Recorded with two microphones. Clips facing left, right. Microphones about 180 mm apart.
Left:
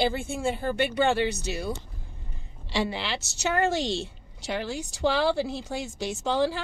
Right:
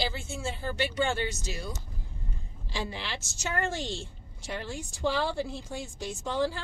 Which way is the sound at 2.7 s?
75° left (ahead or behind).